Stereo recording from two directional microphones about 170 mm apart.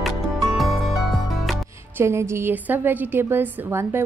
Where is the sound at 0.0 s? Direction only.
Centre (ahead or behind).